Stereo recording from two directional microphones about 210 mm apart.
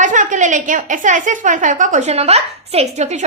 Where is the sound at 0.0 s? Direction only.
35° right (ahead or behind).